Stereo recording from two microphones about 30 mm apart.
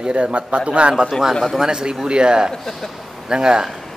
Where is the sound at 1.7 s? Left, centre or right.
Right.